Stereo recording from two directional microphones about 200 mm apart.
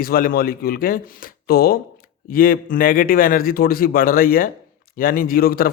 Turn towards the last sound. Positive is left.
turn(degrees=45)  # may be behind; listen again after turning